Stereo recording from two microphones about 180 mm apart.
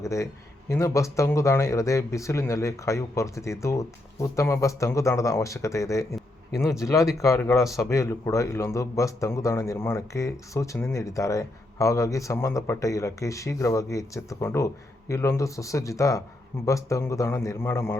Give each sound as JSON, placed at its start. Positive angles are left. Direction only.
{"t": 0.0, "sound": "a man's voice", "side_deg": 15}